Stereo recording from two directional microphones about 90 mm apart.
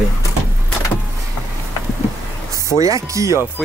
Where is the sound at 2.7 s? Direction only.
35° right (ahead or behind).